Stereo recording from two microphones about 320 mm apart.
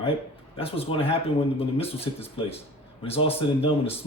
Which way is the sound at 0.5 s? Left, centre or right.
Centre.